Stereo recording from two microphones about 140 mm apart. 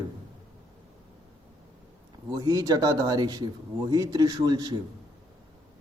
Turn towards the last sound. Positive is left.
turn(degrees=-30)  # may be behind; listen again after turning